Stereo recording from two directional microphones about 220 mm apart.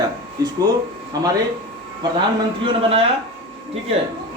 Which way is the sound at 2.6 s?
25° right (ahead or behind).